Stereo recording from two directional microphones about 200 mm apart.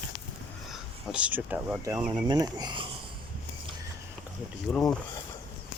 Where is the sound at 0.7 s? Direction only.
5° right (ahead or behind).